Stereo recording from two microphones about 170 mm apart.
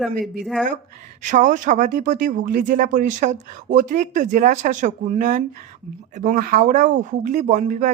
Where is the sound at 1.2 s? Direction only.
45° right (ahead or behind).